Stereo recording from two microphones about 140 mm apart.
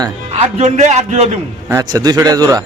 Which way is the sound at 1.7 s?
20° right (ahead or behind).